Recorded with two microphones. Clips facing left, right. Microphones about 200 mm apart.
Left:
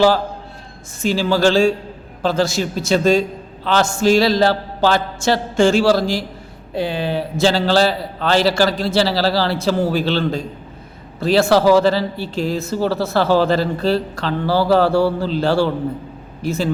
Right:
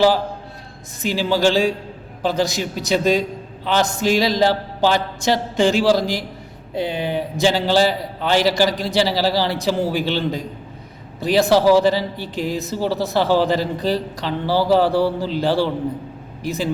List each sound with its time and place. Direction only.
1.0 s speech: 15° right (ahead or behind)